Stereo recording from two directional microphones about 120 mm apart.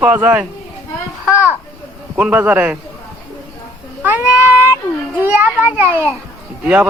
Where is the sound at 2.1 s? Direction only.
10° right (ahead or behind).